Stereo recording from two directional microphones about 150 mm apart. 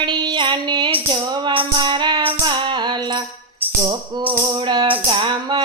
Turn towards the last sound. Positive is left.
turn(degrees=-30)  # may be behind; listen again after turning